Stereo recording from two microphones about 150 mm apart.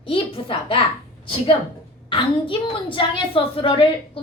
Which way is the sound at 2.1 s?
35° left (ahead or behind).